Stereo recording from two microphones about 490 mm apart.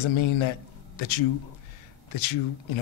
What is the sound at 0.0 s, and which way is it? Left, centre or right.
Speech, left.